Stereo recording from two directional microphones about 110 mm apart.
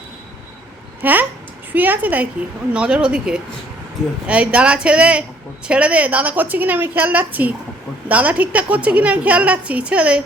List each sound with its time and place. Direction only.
1.0 s a woman's voice: 15° right (ahead or behind)